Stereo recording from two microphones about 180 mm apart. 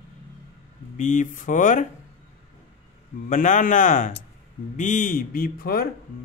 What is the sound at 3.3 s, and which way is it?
Speech, 45° left (ahead or behind).